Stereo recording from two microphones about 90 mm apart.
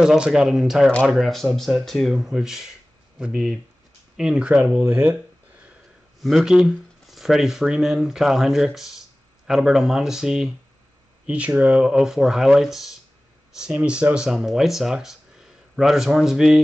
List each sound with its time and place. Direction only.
0.0 s speech: 5° right (ahead or behind)
4.8 s speech: 25° right (ahead or behind)
6.2 s speech: 5° right (ahead or behind)